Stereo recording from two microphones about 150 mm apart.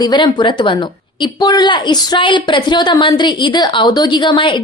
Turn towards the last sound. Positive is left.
turn(degrees=30)  # may be behind; listen again after turning